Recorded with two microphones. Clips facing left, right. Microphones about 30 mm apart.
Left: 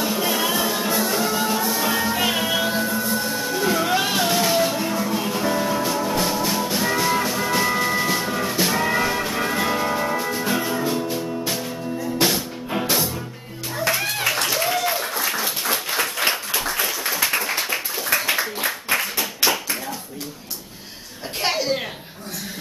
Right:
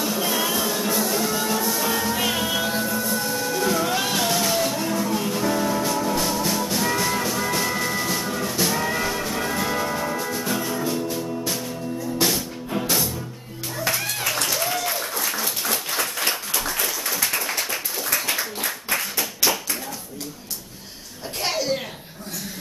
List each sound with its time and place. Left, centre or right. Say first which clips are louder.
0.0 s music: left 2 dB; centre
13.8 s applause: left 4 dB; centre
21.4 s a sound: left 2 dB; centre